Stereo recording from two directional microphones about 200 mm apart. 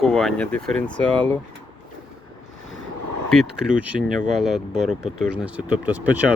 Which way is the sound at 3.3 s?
Centre (ahead or behind).